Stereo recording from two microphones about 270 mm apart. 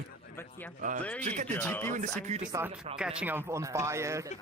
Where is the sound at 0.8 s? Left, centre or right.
Right.